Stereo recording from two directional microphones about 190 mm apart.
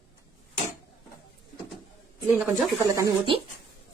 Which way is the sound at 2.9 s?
20° right (ahead or behind).